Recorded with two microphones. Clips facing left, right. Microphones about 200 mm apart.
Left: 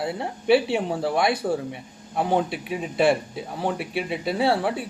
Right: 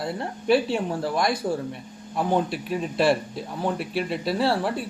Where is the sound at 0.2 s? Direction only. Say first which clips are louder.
Left 2 dB; 65° left (ahead or behind).